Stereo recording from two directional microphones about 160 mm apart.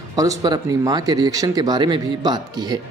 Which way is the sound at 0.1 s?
25° right (ahead or behind).